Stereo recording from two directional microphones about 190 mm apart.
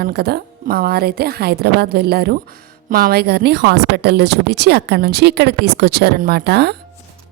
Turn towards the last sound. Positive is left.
turn(degrees=-60)  # may be behind; listen again after turning